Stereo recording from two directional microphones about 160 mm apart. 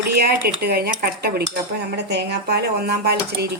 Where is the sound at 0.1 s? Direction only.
75° right (ahead or behind).